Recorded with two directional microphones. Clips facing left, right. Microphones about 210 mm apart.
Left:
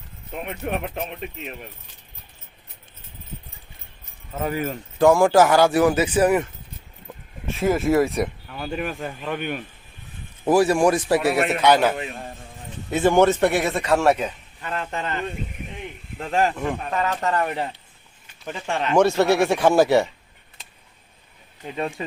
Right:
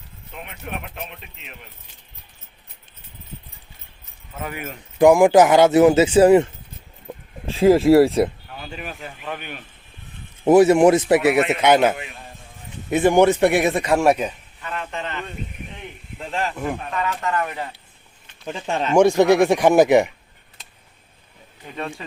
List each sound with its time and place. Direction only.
0.4 s speech: 40° left (ahead or behind)
4.4 s speech: 35° left (ahead or behind)
4.9 s speech: 15° right (ahead or behind)
8.7 s speech: 50° left (ahead or behind)
10.4 s a man's voice: 20° right (ahead or behind)
14.6 s speech: 40° left (ahead or behind)
16.9 s speech: 40° left (ahead or behind)
18.5 s a man's voice: 20° right (ahead or behind)
21.8 s speech: 15° left (ahead or behind)